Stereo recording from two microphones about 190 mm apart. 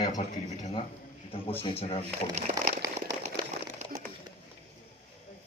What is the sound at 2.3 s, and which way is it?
Speech, 35° right (ahead or behind).